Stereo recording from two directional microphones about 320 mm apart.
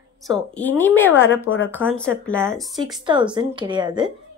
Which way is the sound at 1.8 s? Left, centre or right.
Centre.